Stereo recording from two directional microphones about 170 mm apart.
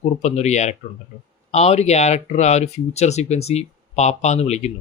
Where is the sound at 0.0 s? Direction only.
40° left (ahead or behind).